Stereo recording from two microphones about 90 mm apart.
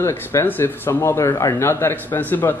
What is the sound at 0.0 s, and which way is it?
Speech, 30° left (ahead or behind).